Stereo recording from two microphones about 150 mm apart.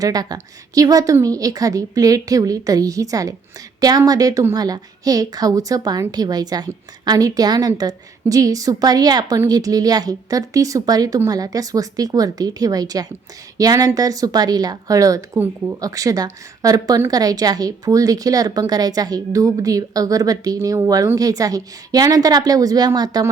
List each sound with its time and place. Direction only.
0.0 s a woman's voice: 25° right (ahead or behind)